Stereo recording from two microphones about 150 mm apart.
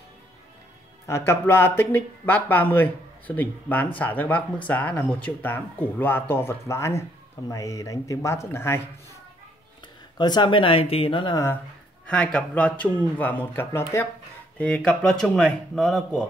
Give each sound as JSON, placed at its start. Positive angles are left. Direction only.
{"t": 1.0, "sound": "speech", "side_deg": 15}
{"t": 10.1, "sound": "speech", "side_deg": 30}
{"t": 12.1, "sound": "speech", "side_deg": 5}